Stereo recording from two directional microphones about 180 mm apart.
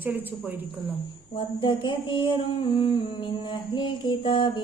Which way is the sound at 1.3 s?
25° left (ahead or behind).